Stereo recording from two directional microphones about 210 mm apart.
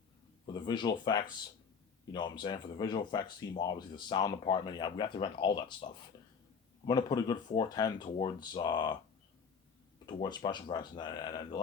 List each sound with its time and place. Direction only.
0.4 s speech: 20° left (ahead or behind)
10.1 s speech: 20° left (ahead or behind)